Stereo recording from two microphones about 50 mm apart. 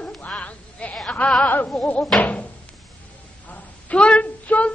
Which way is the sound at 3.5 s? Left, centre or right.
Left.